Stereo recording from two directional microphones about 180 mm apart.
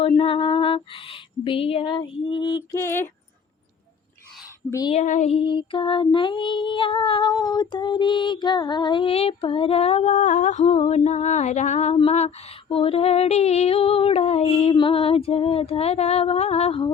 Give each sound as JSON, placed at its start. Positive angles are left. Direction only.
{"t": 0.2, "sound": "female singing", "side_deg": 30}
{"t": 2.7, "sound": "a sound", "side_deg": 15}
{"t": 4.9, "sound": "female singing", "side_deg": 40}